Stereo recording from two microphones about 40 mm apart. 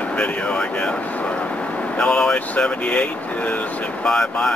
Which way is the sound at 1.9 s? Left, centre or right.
Left.